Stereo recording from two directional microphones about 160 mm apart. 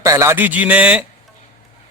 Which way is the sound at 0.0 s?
20° right (ahead or behind).